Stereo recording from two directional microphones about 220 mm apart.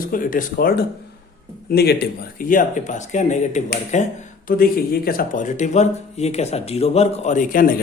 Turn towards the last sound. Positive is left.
turn(degrees=40)  # may be behind; listen again after turning